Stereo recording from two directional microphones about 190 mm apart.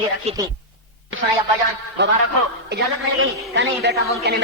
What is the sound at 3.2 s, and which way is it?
A man's voice, 80° right.